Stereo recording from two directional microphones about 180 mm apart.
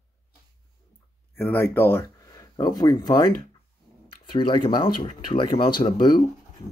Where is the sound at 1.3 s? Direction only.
10° left (ahead or behind).